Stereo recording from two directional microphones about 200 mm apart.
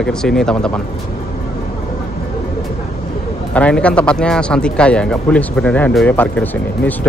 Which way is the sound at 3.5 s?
5° left (ahead or behind).